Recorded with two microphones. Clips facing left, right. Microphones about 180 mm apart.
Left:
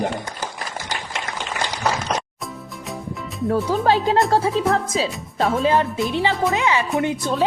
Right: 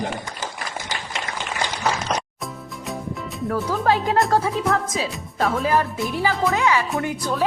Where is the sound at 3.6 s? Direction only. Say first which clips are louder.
Left 1 dB; 25° left (ahead or behind).